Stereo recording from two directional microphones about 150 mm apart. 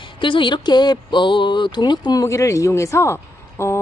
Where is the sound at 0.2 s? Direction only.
35° left (ahead or behind).